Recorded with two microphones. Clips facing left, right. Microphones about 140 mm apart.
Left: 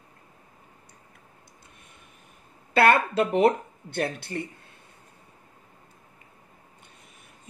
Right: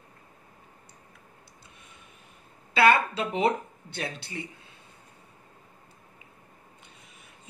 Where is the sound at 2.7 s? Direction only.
55° left (ahead or behind).